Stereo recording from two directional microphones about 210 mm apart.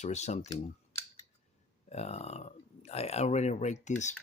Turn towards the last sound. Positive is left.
turn(degrees=35)  # may be behind; listen again after turning